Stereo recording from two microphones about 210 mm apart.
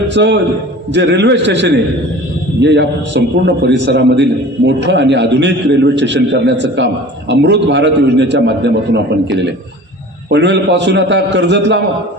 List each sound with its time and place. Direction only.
0.1 s a man's voice: 55° right (ahead or behind)